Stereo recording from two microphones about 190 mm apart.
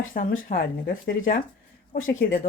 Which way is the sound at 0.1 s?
45° left (ahead or behind).